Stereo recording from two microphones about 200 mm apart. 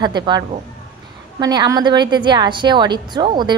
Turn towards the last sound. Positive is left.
turn(degrees=-20)  # may be behind; listen again after turning